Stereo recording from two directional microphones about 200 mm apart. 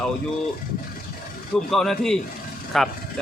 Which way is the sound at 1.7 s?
Centre (ahead or behind).